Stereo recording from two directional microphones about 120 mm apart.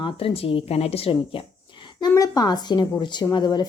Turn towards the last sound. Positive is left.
turn(degrees=35)  # may be behind; listen again after turning